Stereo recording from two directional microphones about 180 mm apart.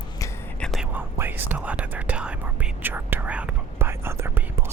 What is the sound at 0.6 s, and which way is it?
Whispering, centre (ahead or behind).